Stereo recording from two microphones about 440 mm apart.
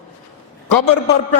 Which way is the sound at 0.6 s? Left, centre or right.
Left.